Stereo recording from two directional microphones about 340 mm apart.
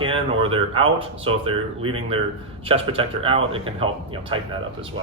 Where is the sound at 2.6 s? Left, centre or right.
Centre.